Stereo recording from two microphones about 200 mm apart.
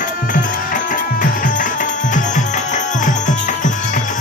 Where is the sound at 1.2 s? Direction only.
40° left (ahead or behind).